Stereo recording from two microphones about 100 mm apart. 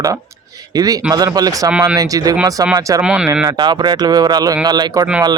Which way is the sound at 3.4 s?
45° right (ahead or behind).